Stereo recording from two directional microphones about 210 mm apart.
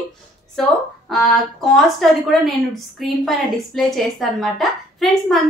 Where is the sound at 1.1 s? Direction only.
Centre (ahead or behind).